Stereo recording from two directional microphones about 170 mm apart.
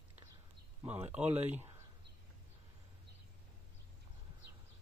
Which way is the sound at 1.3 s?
40° right (ahead or behind).